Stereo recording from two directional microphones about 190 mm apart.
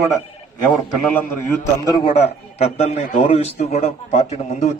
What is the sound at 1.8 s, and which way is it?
A man's voice, 25° left (ahead or behind).